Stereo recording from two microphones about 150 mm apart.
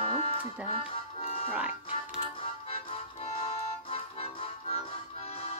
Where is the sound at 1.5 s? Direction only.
10° right (ahead or behind).